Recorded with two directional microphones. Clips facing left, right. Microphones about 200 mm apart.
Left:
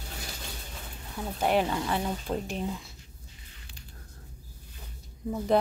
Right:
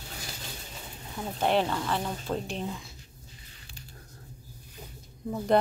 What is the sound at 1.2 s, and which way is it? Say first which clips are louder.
Speech: even; 5° left (ahead or behind).